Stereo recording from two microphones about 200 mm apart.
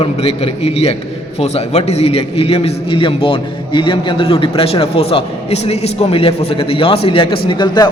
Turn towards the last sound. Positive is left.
turn(degrees=25)  # may be behind; listen again after turning